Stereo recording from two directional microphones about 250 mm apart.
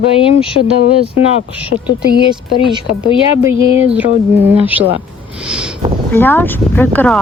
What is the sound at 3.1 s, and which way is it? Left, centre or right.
Speech, left.